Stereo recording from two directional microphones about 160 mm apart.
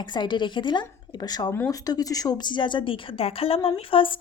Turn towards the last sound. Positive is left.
turn(degrees=35)  # may be behind; listen again after turning